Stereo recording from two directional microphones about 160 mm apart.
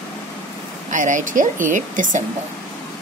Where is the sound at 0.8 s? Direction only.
50° right (ahead or behind).